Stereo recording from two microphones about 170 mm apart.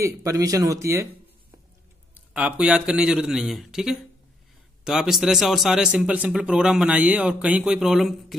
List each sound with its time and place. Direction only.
0.0 s speech: 20° right (ahead or behind)
2.1 s speech: 10° right (ahead or behind)